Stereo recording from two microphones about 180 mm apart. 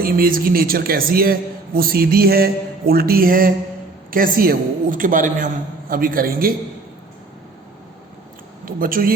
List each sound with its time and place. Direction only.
0.0 s a man's voice: 55° right (ahead or behind)
8.6 s a woman's voice: 50° right (ahead or behind)